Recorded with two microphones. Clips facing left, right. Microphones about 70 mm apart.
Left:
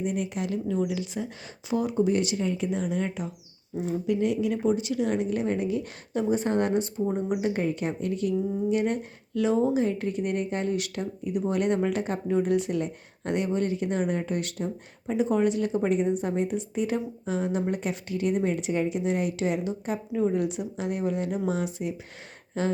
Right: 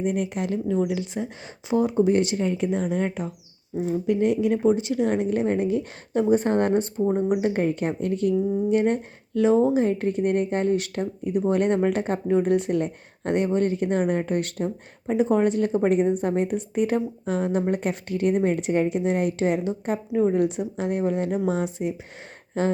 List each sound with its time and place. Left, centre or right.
0.0 s a woman's voice: right